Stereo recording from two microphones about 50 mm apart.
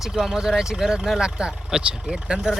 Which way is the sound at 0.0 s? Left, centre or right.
Centre.